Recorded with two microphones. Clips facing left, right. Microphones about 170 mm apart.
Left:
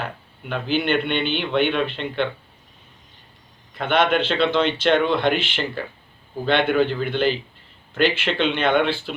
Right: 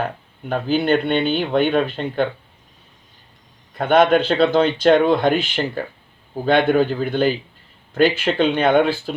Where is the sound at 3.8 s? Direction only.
40° right (ahead or behind).